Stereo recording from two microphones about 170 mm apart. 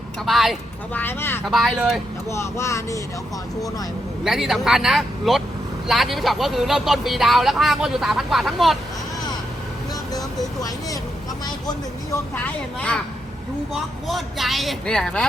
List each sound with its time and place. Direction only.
0.3 s speech: centre (ahead or behind)
0.9 s speech: 10° left (ahead or behind)
1.5 s speech: centre (ahead or behind)
2.3 s speech: 15° left (ahead or behind)
4.2 s speech: centre (ahead or behind)
12.3 s speech: 10° left (ahead or behind)
14.1 s speech: centre (ahead or behind)